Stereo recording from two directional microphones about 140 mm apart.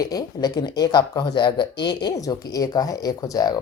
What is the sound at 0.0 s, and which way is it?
A woman's voice, 25° left (ahead or behind).